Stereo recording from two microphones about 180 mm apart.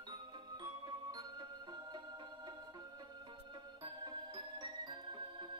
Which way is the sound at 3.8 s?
25° right (ahead or behind).